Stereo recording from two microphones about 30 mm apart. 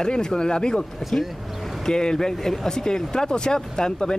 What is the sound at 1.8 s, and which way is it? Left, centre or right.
Speech, left.